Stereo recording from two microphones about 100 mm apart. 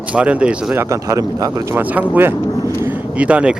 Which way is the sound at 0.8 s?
35° right (ahead or behind).